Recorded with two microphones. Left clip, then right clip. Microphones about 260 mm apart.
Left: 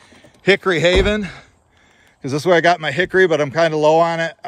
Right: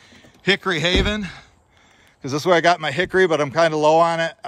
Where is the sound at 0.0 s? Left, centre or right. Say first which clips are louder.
Left 5 dB; centre.